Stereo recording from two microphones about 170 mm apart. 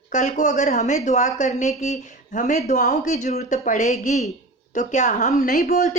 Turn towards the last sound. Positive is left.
turn(degrees=65)  # may be behind; listen again after turning